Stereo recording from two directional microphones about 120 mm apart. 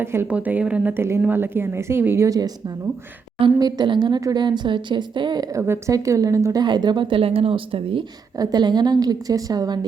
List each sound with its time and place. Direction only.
0.0 s a woman's voice: 20° right (ahead or behind); by 5.5 s 40° right (ahead or behind)
5.5 s a woman's voice: 20° right (ahead or behind); by 8.0 s 45° right (ahead or behind)
8.4 s a woman's voice: 35° right (ahead or behind)